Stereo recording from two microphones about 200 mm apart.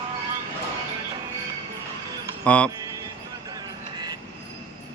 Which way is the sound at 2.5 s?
5° left (ahead or behind).